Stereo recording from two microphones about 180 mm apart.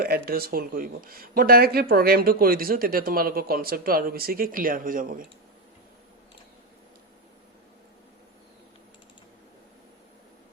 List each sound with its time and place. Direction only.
0.0 s speech: 60° right (ahead or behind)